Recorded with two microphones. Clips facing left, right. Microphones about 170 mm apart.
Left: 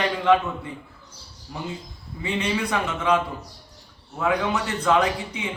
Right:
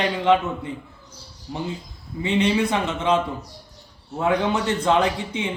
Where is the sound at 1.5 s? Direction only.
25° right (ahead or behind).